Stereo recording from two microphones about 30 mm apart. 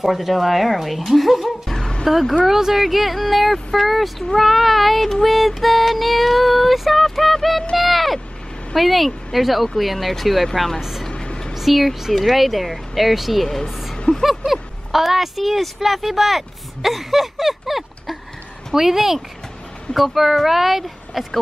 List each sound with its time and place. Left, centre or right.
0.0 s speech: centre
4.4 s child singing: centre
7.7 s vehicle: centre
8.7 s speech: centre
10.8 s speech: centre
11.1 s a sound: left
11.5 s speech: centre
13.9 s a sound: left
14.2 s speech: centre